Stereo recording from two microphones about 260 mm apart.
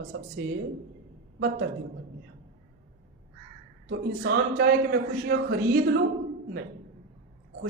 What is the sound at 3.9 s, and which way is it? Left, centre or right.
Speech, right.